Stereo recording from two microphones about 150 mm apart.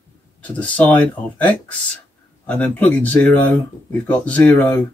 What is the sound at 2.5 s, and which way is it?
Speech, 10° left (ahead or behind).